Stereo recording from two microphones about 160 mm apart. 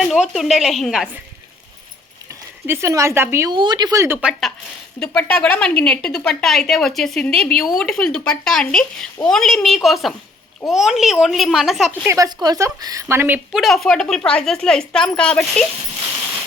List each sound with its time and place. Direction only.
0.0 s speech: centre (ahead or behind)
2.6 s a woman's voice: 20° right (ahead or behind)
3.5 s a woman's voice: 30° right (ahead or behind); by 11.9 s centre (ahead or behind)
12.0 s a woman's voice: 20° right (ahead or behind)
13.6 s speech: centre (ahead or behind)